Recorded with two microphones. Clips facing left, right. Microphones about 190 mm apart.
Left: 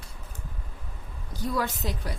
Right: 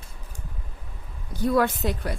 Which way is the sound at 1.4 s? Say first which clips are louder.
Right 7 dB; 60° right (ahead or behind).